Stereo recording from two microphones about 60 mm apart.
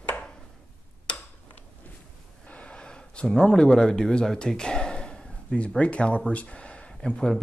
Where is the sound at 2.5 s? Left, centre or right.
Centre.